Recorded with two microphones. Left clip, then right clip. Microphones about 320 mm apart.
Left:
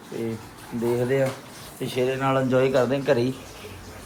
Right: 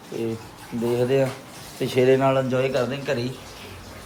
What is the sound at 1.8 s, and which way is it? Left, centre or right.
Speech, right.